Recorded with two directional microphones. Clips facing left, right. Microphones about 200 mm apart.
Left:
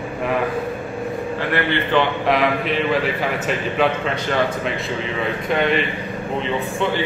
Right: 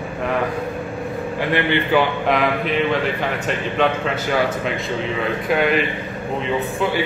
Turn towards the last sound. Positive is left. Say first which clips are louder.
# right 1 dB
turn(degrees=-5)  # may be behind; listen again after turning